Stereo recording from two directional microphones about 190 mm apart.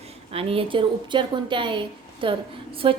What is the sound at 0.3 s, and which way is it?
A woman's voice, 30° right (ahead or behind).